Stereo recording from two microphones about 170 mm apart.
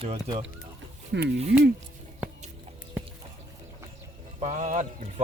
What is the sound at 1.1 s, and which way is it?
Speech, 90° right.